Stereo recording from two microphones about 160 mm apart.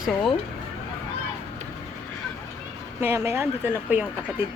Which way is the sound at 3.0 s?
15° right (ahead or behind).